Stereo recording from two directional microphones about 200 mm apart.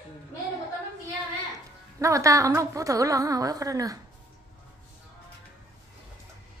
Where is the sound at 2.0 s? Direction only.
15° right (ahead or behind).